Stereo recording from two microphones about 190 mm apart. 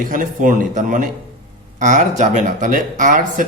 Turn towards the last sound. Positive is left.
turn(degrees=-45)  # may be behind; listen again after turning